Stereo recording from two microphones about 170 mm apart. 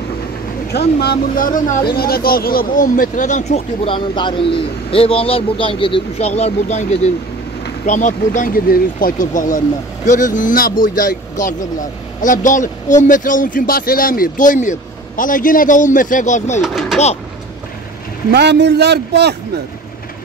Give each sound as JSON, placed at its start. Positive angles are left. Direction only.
{"t": 0.7, "sound": "speech", "side_deg": 65}
{"t": 16.6, "sound": "speech", "side_deg": 0}
{"t": 18.3, "sound": "a man's voice", "side_deg": -85}